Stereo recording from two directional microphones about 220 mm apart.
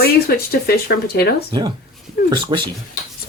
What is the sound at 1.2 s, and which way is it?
Speech, 45° left (ahead or behind).